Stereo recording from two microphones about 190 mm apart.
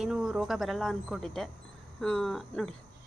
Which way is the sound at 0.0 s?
Centre (ahead or behind).